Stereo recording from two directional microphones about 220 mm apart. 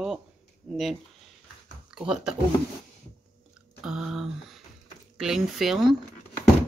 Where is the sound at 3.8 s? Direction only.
Centre (ahead or behind).